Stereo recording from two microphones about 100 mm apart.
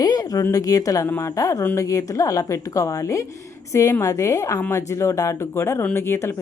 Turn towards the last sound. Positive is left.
turn(degrees=25)  # may be behind; listen again after turning